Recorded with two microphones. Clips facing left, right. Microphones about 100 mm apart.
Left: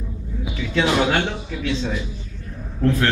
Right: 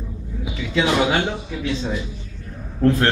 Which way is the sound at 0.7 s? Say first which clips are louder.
Even; 5° right (ahead or behind).